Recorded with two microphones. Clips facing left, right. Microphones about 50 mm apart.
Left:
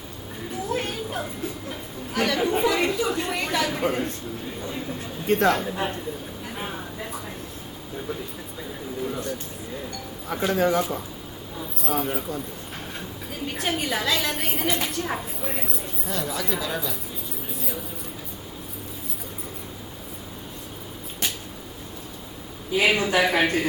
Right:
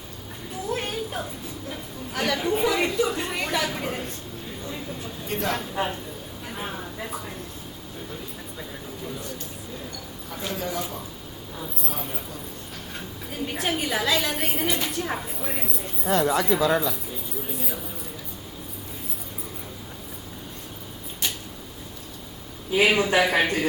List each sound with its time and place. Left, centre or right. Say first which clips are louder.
0.7 s a sound: even; centre
2.1 s a woman's voice: left 2 dB; centre
5.3 s a man's voice: left 8 dB; left
5.7 s a woman's voice: right 1 dB; centre
6.5 s a sound: even; centre
10.4 s a man's voice: left 8 dB; left
13.5 s a woman's voice: even; centre
16.0 s speech: right 8 dB; right
17.5 s a sound: even; centre
22.8 s a woman's voice: right 1 dB; centre